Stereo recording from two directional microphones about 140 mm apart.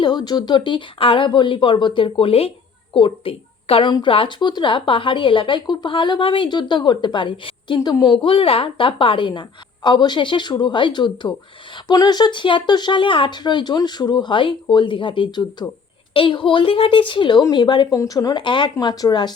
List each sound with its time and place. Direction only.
0.0 s a woman's voice: 30° left (ahead or behind)